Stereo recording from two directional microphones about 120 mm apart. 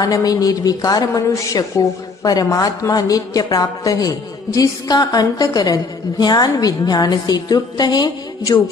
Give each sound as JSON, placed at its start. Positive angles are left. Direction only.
{"t": 0.0, "sound": "a woman's voice", "side_deg": 30}